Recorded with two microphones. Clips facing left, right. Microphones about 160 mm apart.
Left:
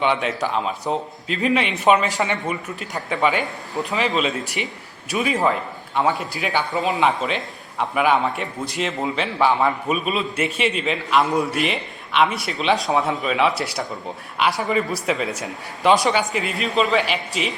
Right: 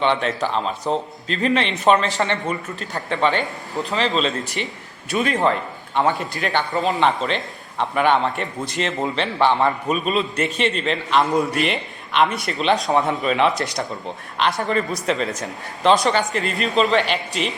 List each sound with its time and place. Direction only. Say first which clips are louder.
0.0 s a man's voice: right 1 dB; 5° left (ahead or behind)
3.8 s a man's voice: right 1 dB; 15° left (ahead or behind)
4.1 s a man's voice: right 1 dB; centre (ahead or behind)